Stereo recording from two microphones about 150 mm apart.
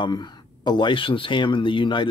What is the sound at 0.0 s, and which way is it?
Speech, 30° left (ahead or behind).